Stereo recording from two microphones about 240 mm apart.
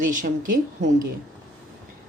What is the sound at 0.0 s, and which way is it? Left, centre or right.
Speech, right.